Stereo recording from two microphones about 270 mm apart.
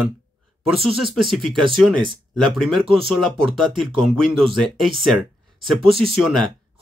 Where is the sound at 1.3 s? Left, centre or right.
Centre.